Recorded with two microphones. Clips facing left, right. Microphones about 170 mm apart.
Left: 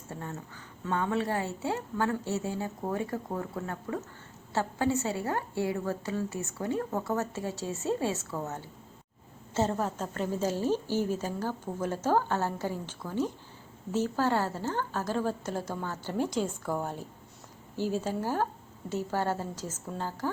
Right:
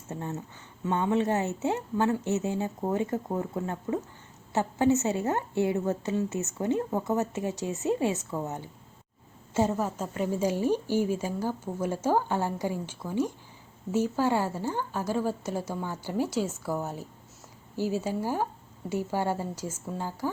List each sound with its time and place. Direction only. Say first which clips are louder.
0.1 s a woman's voice: right 4 dB; 20° right (ahead or behind)